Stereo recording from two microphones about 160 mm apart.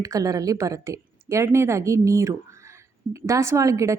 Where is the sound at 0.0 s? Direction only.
20° right (ahead or behind).